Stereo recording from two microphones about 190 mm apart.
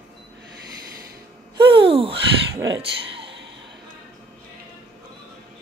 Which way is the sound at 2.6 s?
25° right (ahead or behind).